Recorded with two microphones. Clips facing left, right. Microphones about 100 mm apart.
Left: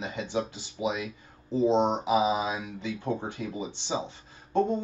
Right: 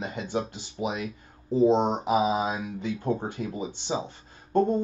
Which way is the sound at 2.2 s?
50° right (ahead or behind).